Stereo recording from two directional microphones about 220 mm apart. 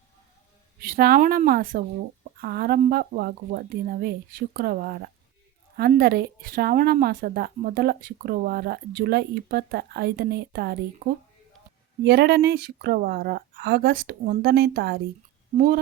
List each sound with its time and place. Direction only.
0.8 s a woman's voice: 45° right (ahead or behind)